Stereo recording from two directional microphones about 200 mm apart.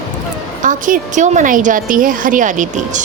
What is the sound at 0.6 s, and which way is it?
A woman's voice, 40° right (ahead or behind).